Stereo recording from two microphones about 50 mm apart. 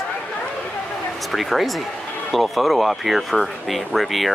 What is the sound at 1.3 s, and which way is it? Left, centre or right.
Speech, centre.